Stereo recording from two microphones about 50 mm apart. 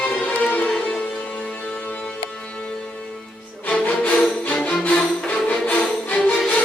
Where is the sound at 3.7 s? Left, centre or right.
Left.